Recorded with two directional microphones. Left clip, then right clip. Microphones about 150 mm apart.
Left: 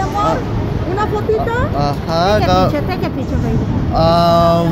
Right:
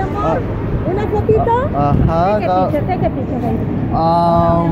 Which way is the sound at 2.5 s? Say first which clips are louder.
Left 1 dB; 35° left (ahead or behind).